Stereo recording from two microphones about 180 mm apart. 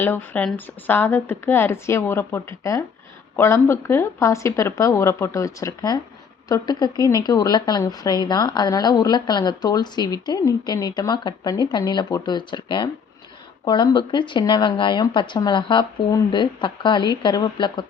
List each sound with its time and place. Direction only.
0.0 s a woman's voice: 10° left (ahead or behind)